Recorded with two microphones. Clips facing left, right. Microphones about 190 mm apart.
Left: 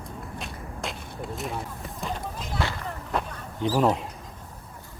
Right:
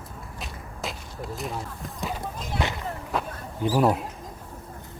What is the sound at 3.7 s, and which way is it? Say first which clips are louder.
Speech: right 1 dB; 5° right (ahead or behind).